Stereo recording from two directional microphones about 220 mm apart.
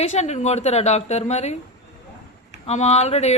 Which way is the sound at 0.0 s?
30° left (ahead or behind).